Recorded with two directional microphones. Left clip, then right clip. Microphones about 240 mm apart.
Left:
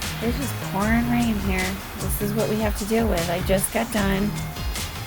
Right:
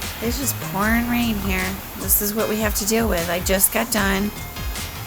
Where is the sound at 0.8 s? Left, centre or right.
Centre.